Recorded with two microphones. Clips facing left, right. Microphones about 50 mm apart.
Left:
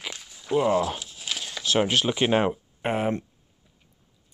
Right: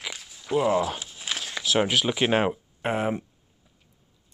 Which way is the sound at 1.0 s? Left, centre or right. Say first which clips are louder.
Right 1 dB; right.